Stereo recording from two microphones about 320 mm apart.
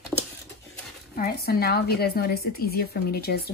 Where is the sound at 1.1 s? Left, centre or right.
Left.